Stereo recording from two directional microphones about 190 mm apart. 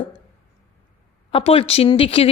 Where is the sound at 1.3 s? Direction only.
30° left (ahead or behind).